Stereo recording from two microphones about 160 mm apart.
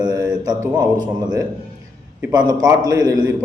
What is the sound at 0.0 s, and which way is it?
Mantra, 25° right (ahead or behind).